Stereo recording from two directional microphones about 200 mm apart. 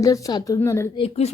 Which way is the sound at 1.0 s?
30° left (ahead or behind).